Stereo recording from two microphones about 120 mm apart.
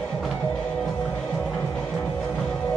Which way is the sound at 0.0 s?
5° left (ahead or behind).